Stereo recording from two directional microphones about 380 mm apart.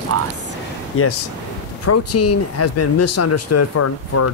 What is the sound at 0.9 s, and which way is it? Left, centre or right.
Speech, left.